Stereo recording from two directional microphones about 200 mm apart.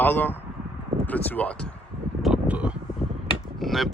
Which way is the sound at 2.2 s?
5° right (ahead or behind).